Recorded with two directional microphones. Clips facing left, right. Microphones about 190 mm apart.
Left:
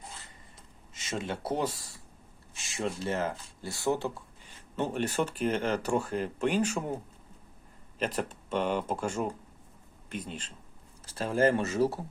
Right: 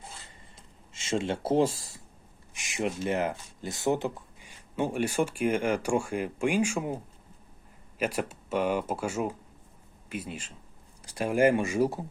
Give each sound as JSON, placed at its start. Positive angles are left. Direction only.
{"t": 0.9, "sound": "speech", "side_deg": -25}